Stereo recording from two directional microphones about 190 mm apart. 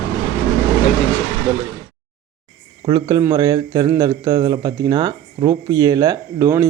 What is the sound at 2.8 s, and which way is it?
Speech, 20° right (ahead or behind).